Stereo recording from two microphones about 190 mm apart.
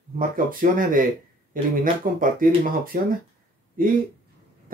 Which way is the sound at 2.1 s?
50° right (ahead or behind).